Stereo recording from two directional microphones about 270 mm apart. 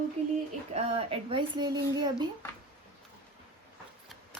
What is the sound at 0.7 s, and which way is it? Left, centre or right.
Speech, right.